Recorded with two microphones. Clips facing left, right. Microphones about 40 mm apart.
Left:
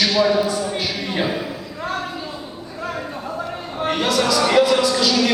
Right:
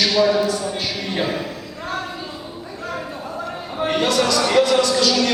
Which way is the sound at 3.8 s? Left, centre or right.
Centre.